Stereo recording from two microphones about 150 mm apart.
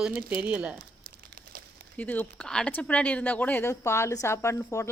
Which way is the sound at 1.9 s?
10° left (ahead or behind).